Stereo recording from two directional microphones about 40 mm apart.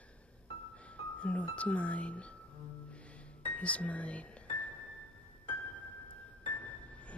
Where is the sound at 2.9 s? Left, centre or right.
Left.